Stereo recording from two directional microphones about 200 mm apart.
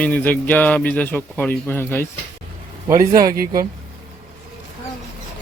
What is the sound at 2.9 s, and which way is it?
Speech, 15° right (ahead or behind).